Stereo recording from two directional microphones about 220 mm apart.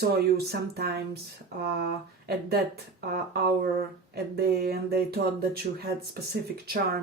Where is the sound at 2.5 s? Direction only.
45° right (ahead or behind).